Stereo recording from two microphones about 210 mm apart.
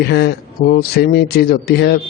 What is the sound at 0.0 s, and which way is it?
Speech, 50° left (ahead or behind).